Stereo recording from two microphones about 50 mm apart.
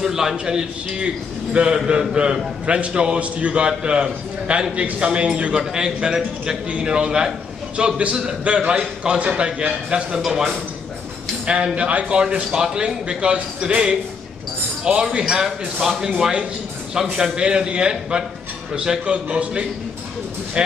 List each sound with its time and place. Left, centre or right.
0.0 s a man's voice: centre
11.4 s a man's voice: right
12.4 s a man's voice: centre
14.9 s a man's voice: centre